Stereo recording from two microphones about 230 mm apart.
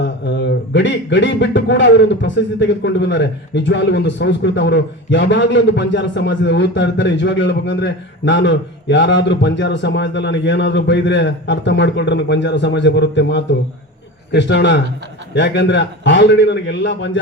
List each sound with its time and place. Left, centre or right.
0.0 s speech: left